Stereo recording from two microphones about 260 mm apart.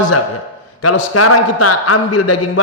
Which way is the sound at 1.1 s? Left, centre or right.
Left.